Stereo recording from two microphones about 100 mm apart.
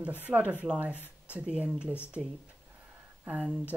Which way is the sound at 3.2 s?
10° right (ahead or behind).